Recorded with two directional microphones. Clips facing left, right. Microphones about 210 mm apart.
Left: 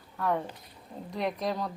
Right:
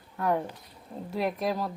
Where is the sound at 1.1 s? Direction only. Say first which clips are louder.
Right 2 dB; 5° right (ahead or behind).